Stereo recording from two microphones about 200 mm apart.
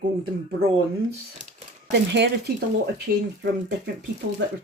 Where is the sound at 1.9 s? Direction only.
60° right (ahead or behind).